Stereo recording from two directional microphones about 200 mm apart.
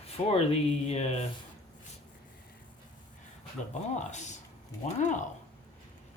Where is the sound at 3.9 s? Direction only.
35° left (ahead or behind).